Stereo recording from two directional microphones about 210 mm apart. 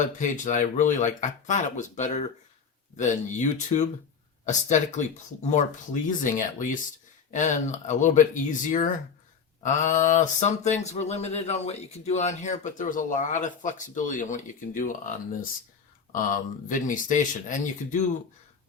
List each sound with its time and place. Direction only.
0.0 s speech: 35° left (ahead or behind)